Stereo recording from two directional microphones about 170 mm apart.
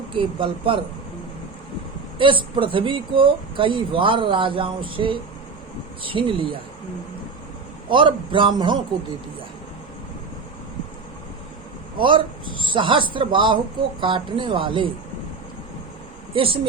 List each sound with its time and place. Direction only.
0.1 s speech: 30° right (ahead or behind)
2.1 s speech: 30° right (ahead or behind)
7.9 s a man's voice: 30° right (ahead or behind)
11.9 s a man's voice: 30° right (ahead or behind)
16.3 s speech: 30° right (ahead or behind)